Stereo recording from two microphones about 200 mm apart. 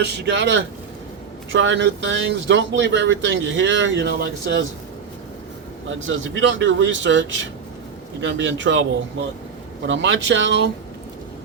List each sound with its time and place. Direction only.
0.0 s speech: 60° right (ahead or behind)
6.0 s speech: 70° right (ahead or behind)